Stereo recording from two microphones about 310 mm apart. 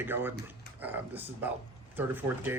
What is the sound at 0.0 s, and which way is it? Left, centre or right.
Speech, centre.